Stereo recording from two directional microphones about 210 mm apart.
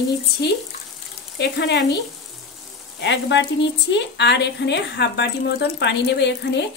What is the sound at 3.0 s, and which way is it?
Speech, 60° left (ahead or behind).